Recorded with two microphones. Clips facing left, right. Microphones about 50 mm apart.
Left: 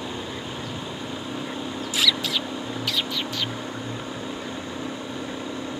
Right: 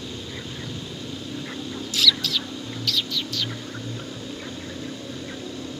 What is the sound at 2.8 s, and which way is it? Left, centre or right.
Bird, left.